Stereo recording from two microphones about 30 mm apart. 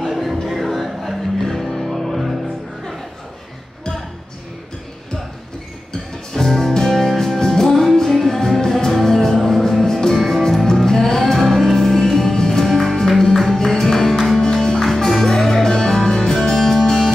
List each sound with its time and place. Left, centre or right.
0.0 s music: centre
6.3 s music: centre
12.6 s music: centre
14.8 s music: centre
16.3 s music: centre